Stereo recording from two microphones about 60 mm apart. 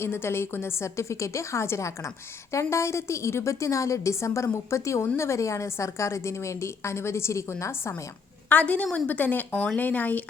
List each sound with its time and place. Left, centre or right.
0.0 s a woman's voice: left
8.4 s speech: left